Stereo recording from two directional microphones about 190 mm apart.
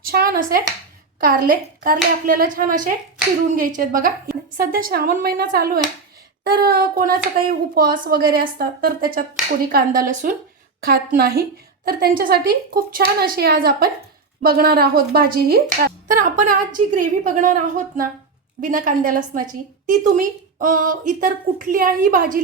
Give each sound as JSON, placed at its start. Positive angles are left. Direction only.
{"t": 0.1, "sound": "a woman's voice", "side_deg": -50}
{"t": 10.8, "sound": "a woman's voice", "side_deg": -55}
{"t": 16.0, "sound": "a woman's voice", "side_deg": -40}